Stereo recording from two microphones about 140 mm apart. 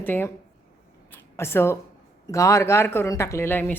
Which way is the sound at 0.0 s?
15° left (ahead or behind).